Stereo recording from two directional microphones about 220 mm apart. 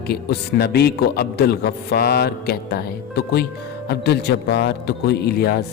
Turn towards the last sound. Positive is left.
turn(degrees=45)  # may be behind; listen again after turning